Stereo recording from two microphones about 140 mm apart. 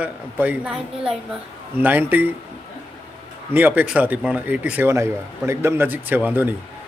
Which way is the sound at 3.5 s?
10° right (ahead or behind).